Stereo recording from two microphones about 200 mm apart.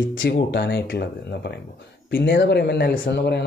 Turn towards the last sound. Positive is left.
turn(degrees=60)  # may be behind; listen again after turning